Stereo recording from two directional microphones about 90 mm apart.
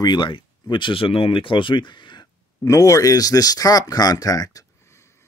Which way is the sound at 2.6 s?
35° left (ahead or behind).